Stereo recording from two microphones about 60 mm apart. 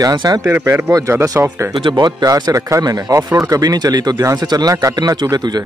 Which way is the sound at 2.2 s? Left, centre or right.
Right.